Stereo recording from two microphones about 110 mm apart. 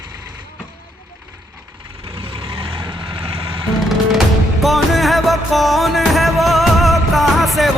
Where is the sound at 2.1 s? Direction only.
55° right (ahead or behind).